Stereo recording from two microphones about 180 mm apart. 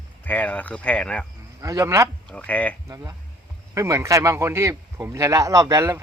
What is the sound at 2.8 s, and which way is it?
Speech, 20° right (ahead or behind).